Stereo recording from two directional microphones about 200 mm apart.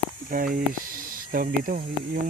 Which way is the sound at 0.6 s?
45° right (ahead or behind).